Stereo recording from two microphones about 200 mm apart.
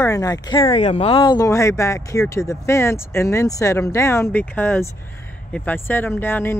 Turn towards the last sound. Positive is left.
turn(degrees=10)  # may be behind; listen again after turning